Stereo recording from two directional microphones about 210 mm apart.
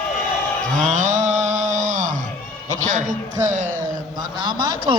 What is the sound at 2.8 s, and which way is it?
A man's voice, 35° right (ahead or behind).